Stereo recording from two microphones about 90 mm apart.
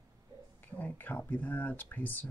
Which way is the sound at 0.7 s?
20° left (ahead or behind).